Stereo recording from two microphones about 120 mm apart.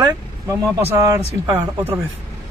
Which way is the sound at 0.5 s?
25° right (ahead or behind).